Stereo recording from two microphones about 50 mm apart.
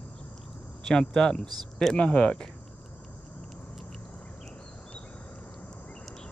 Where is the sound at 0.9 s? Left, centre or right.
Centre.